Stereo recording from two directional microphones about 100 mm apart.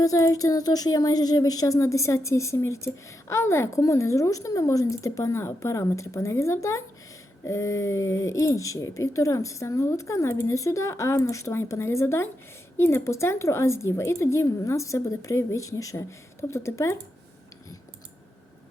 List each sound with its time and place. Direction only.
0.0 s a woman's voice: 35° left (ahead or behind)